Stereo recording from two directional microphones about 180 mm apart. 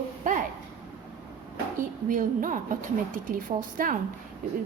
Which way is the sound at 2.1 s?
50° right (ahead or behind).